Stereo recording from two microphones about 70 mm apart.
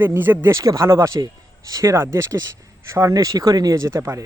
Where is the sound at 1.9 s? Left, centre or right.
Right.